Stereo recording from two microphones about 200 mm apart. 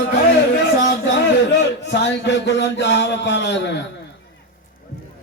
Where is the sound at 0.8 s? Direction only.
60° left (ahead or behind).